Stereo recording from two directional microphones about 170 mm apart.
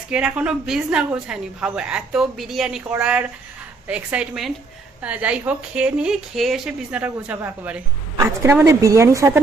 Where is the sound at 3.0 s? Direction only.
5° right (ahead or behind).